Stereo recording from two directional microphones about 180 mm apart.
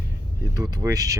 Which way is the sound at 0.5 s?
20° right (ahead or behind).